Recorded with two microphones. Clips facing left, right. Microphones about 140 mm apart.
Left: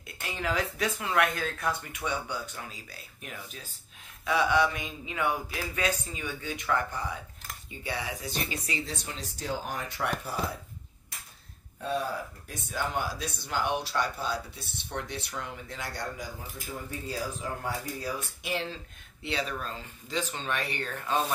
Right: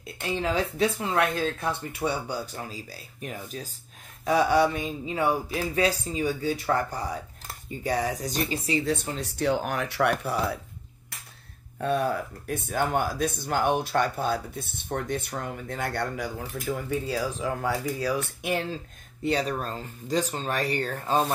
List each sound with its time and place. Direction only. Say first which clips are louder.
0.0 s speech: right 6 dB; 30° right (ahead or behind)
9.2 s speech: right 7 dB; 65° right (ahead or behind)
11.8 s speech: right 6 dB; 60° right (ahead or behind); by 18.2 s 90° right
18.4 s speech: right 5 dB; 50° right (ahead or behind)